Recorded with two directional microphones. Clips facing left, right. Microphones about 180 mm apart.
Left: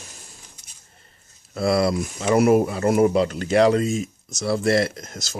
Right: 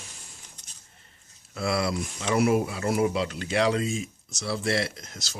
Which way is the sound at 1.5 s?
40° left (ahead or behind).